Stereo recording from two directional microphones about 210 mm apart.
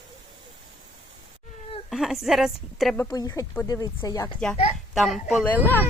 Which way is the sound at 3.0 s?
15° left (ahead or behind).